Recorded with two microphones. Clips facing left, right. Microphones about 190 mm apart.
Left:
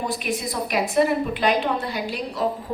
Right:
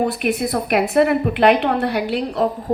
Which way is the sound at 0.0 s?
60° right (ahead or behind).